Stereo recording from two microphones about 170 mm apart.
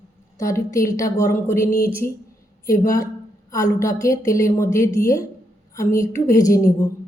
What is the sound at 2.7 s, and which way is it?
Speech, 20° left (ahead or behind).